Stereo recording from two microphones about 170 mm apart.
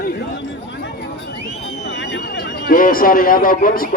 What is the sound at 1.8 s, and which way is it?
Speech, 90° left.